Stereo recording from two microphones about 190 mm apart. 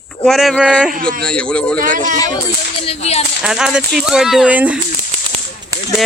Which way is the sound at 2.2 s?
20° left (ahead or behind).